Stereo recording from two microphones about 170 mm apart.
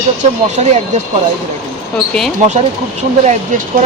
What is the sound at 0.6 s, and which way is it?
Speech, 40° right (ahead or behind).